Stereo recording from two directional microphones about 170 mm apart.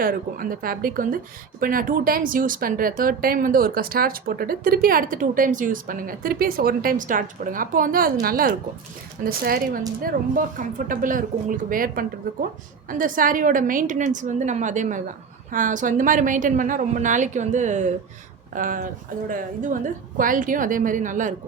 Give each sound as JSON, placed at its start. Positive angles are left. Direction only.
{"t": 0.0, "sound": "a woman's voice", "side_deg": -55}